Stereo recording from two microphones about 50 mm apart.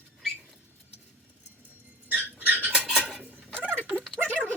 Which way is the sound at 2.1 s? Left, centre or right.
Right.